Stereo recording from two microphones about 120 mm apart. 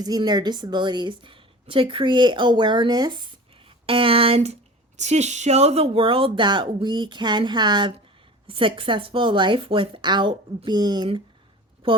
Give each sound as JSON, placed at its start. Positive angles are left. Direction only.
{"t": 0.0, "sound": "a woman's voice", "side_deg": -35}
{"t": 4.9, "sound": "speech", "side_deg": -70}